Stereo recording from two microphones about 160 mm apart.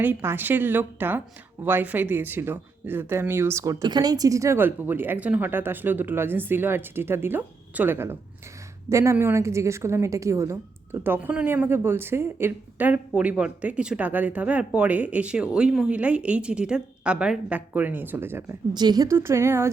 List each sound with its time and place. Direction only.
0.0 s a woman's voice: 15° right (ahead or behind)
18.7 s a woman's voice: 25° right (ahead or behind)